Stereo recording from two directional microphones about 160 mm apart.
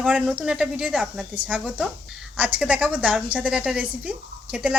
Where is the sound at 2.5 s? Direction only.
5° right (ahead or behind).